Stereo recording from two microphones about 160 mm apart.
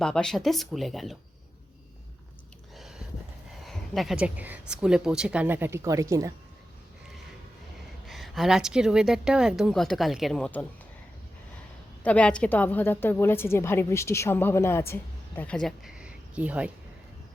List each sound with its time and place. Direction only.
0.0 s a woman's voice: 5° left (ahead or behind)
3.7 s speech: centre (ahead or behind); by 6.3 s 20° right (ahead or behind)
8.0 s a woman's voice: centre (ahead or behind)
12.0 s a woman's voice: 5° left (ahead or behind); by 16.7 s 10° right (ahead or behind)